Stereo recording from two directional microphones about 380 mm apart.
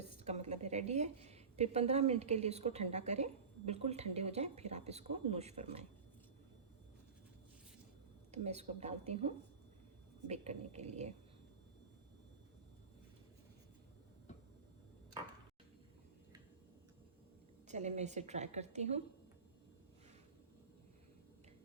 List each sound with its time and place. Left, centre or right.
0.0 s a woman's voice: centre
8.3 s speech: centre
17.7 s speech: centre